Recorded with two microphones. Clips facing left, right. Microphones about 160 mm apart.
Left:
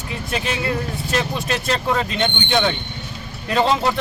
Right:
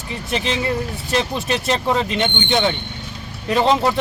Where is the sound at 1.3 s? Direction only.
15° right (ahead or behind).